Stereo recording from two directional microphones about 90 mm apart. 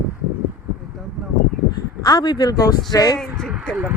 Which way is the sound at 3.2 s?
5° left (ahead or behind).